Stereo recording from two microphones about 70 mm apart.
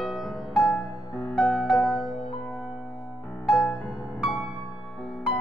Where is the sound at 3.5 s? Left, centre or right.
Left.